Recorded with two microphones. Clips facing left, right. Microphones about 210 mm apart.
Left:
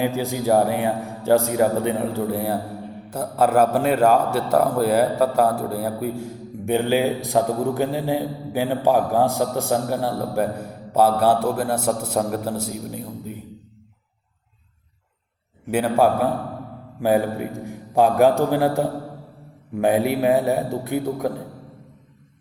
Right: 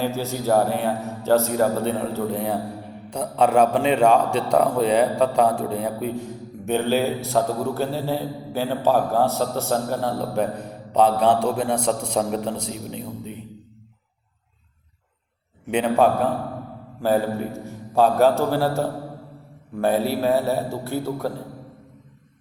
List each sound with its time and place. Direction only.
0.0 s a man's voice: 15° left (ahead or behind)
15.7 s a man's voice: 10° left (ahead or behind)